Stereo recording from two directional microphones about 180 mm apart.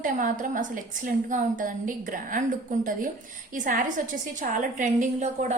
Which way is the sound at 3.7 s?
45° right (ahead or behind).